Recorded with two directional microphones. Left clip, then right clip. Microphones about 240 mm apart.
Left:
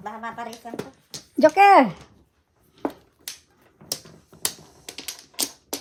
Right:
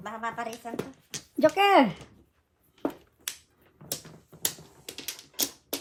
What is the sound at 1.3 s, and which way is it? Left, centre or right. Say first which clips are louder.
Speech: left 7 dB; left.